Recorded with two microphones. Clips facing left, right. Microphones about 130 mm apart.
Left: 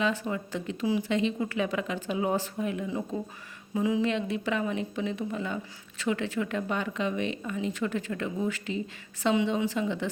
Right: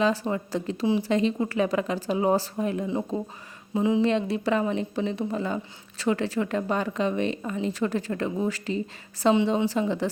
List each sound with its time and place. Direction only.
0.0 s a woman's voice: 35° right (ahead or behind)
2.8 s a woman's voice: 25° right (ahead or behind)